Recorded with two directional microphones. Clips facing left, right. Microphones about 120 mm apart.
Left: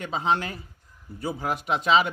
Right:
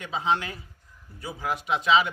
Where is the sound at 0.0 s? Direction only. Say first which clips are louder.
Left 1 dB; 40° left (ahead or behind).